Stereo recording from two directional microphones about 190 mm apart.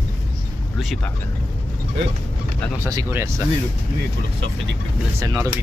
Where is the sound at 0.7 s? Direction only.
Centre (ahead or behind).